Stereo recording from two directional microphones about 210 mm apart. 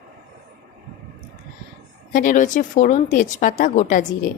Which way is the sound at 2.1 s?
40° left (ahead or behind).